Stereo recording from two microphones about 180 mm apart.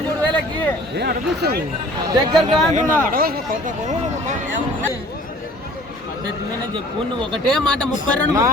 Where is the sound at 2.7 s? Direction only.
45° right (ahead or behind).